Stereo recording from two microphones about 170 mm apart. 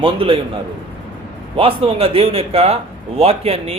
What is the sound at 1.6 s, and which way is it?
A man's voice, 35° right (ahead or behind).